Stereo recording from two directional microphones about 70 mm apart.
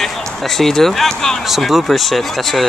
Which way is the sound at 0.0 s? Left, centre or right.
Centre.